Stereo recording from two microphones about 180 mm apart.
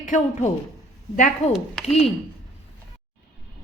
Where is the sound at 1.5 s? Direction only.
Centre (ahead or behind).